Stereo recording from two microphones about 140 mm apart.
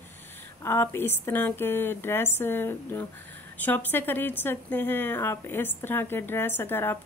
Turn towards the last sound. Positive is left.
turn(degrees=15)  # may be behind; listen again after turning